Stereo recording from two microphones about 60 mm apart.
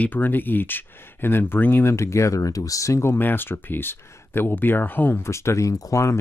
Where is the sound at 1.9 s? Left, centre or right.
Left.